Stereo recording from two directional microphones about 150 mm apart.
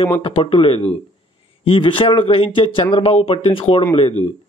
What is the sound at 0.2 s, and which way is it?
A man's voice, 40° left (ahead or behind).